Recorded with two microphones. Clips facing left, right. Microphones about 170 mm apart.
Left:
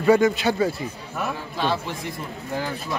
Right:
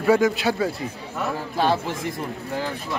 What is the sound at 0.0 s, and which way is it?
Speech, centre (ahead or behind).